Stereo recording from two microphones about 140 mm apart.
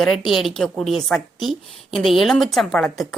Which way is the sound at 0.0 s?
Centre (ahead or behind).